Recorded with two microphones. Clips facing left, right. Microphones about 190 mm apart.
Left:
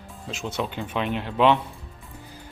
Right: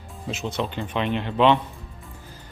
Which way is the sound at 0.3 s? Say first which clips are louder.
Right 2 dB; 5° left (ahead or behind).